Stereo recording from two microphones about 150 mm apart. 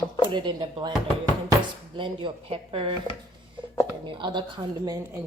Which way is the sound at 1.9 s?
35° right (ahead or behind).